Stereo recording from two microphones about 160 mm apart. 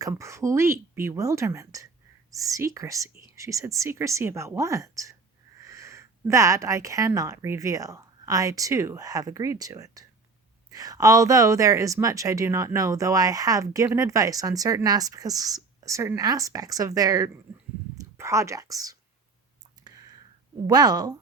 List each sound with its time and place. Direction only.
0.0 s speech: 20° right (ahead or behind)
19.8 s clicking: 25° right (ahead or behind)
20.7 s speech: 25° right (ahead or behind)